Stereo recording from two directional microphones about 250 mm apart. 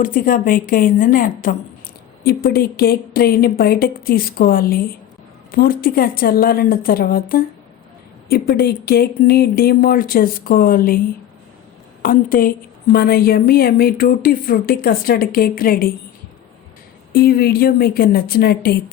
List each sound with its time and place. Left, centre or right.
0.0 s a woman's voice: left
12.0 s a woman's voice: left
17.1 s a woman's voice: left